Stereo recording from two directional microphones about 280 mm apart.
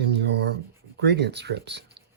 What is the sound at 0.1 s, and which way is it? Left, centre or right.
Writing, right.